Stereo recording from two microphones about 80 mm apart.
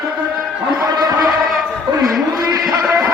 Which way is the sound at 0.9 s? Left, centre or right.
Right.